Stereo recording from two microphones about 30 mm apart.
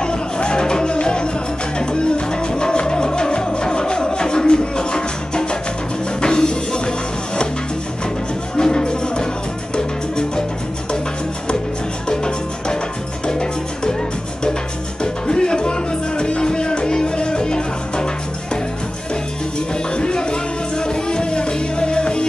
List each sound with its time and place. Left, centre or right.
0.0 s music: left
8.5 s music: left
13.3 s music: left
15.2 s music: left
20.0 s music: left